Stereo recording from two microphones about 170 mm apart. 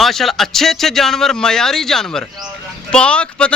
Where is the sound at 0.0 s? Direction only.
Centre (ahead or behind).